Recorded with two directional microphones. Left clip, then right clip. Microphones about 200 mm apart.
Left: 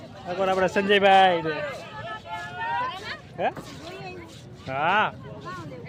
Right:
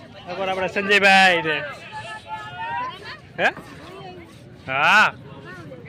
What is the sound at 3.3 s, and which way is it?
Speech, centre (ahead or behind).